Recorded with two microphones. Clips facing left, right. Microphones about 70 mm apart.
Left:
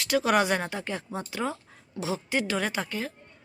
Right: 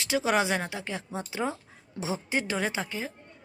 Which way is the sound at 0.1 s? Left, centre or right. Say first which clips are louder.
Left 2 dB; centre.